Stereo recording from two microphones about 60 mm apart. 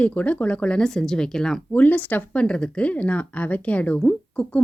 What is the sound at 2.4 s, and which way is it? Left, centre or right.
Speech, centre.